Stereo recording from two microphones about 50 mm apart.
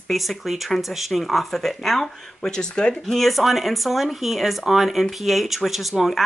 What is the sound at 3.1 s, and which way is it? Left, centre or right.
Speech, centre.